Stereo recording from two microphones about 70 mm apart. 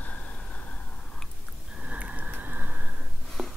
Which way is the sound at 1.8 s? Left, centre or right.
Centre.